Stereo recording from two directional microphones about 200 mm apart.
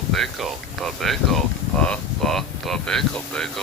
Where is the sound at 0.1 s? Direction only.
Centre (ahead or behind).